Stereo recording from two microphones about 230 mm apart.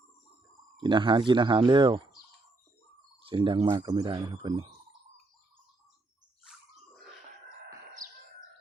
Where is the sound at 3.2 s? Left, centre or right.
Right.